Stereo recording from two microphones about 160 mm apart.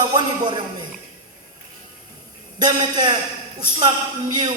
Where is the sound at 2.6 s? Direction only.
25° right (ahead or behind).